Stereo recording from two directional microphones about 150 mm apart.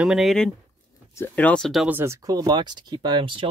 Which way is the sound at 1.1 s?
15° left (ahead or behind).